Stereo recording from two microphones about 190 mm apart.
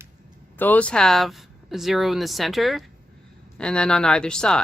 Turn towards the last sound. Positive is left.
turn(degrees=5)  # may be behind; listen again after turning